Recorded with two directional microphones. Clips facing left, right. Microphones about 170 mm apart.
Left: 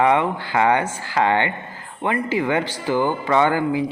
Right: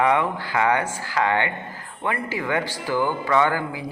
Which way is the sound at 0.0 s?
25° left (ahead or behind).